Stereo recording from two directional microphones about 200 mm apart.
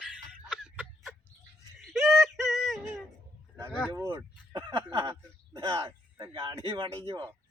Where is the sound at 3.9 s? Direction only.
20° right (ahead or behind).